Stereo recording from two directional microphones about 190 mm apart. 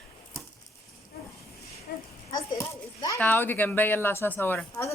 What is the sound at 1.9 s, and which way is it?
Speech, 60° left (ahead or behind).